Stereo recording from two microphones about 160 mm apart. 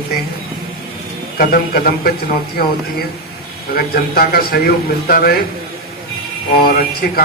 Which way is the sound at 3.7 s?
70° left (ahead or behind).